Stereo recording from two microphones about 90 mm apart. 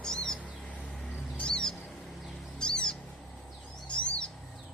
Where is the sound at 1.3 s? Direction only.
10° left (ahead or behind).